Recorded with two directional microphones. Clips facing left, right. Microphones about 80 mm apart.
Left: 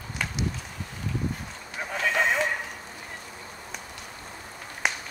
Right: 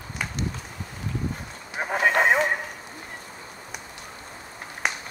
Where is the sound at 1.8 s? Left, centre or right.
Right.